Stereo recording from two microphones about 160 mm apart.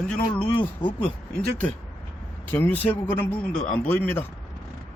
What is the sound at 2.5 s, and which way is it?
Speech, 10° left (ahead or behind).